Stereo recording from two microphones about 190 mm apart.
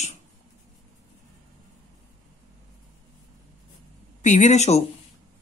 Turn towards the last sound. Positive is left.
turn(degrees=35)  # may be behind; listen again after turning